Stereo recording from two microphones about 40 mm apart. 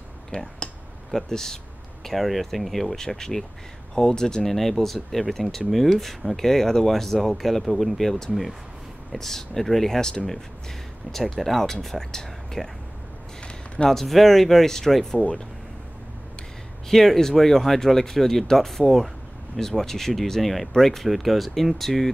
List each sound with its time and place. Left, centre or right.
1.1 s speech: centre
2.0 s speech: centre
3.0 s speech: centre
11.1 s speech: centre
13.4 s a sound: left
13.8 s speech: centre
16.9 s speech: centre